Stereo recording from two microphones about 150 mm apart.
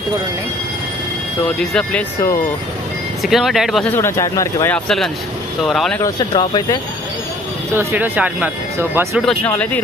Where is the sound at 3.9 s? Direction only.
15° left (ahead or behind).